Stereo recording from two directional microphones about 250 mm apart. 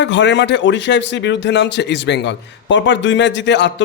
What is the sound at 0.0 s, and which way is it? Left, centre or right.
A man's voice, left.